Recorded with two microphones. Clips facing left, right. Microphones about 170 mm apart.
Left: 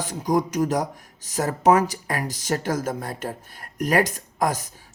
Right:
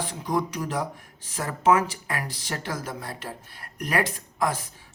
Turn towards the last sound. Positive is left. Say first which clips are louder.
# left 3 dB
turn(degrees=40)  # may be behind; listen again after turning